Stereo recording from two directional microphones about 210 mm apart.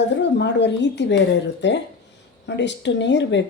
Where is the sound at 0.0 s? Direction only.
55° left (ahead or behind).